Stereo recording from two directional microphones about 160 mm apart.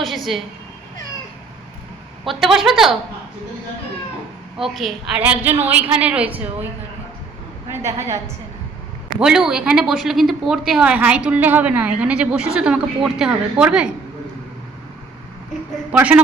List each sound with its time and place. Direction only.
0.0 s a woman's voice: centre (ahead or behind)
2.2 s a woman's voice: centre (ahead or behind)
4.5 s a woman's voice: centre (ahead or behind)
5.2 s a woman's voice: 10° right (ahead or behind)
7.7 s a woman's voice: 15° right (ahead or behind)
9.1 s a man's voice: 5° right (ahead or behind)
15.9 s a woman's voice: 10° right (ahead or behind)